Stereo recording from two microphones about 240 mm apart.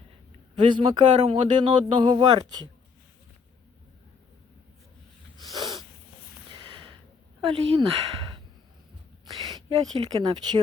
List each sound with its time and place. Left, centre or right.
0.7 s speech: right
5.4 s sneeze: centre
6.6 s a sound: right
7.4 s speech: right